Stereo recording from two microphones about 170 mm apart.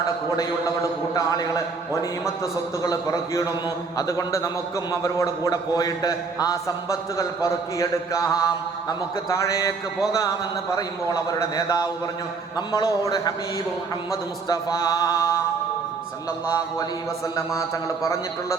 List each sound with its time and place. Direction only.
1.1 s a man's voice: 20° left (ahead or behind)
17.8 s a man's voice: 15° left (ahead or behind)